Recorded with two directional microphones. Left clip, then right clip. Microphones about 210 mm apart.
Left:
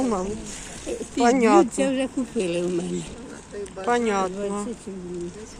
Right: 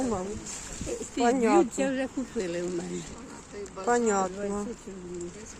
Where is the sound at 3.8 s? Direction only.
20° right (ahead or behind).